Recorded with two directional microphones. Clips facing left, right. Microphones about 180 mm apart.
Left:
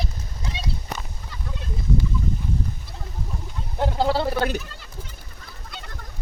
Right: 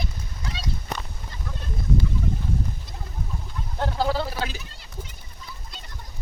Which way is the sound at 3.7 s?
15° left (ahead or behind).